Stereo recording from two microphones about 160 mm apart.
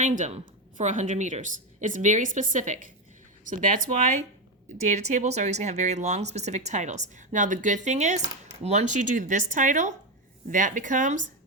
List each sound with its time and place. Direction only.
0.0 s speech: 45° right (ahead or behind)